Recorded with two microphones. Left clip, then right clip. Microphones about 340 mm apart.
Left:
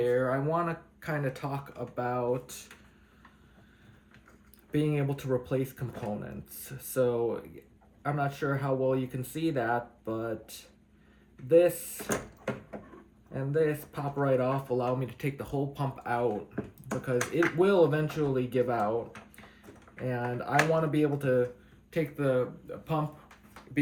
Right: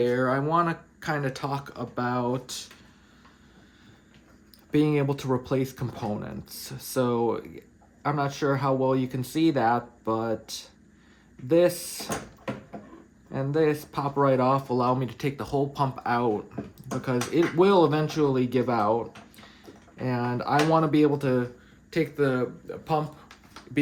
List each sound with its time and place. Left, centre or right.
0.0 s speech: centre
4.7 s speech: centre
11.4 s speech: centre
13.3 s speech: centre
20.1 s speech: centre